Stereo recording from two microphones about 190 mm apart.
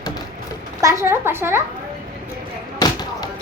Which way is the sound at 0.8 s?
15° right (ahead or behind).